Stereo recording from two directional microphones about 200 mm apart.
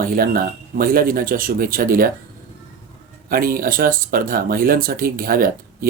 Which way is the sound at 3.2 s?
45° right (ahead or behind).